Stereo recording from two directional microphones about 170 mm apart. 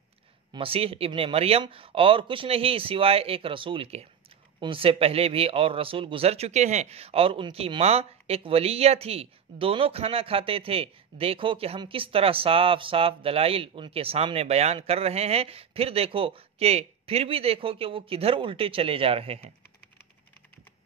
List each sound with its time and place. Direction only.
0.5 s speech: 30° right (ahead or behind)